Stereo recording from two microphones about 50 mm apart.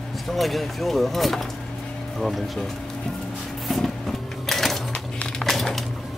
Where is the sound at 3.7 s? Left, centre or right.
Centre.